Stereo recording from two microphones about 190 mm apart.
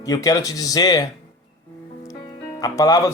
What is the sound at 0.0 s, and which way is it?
Speech, 20° left (ahead or behind).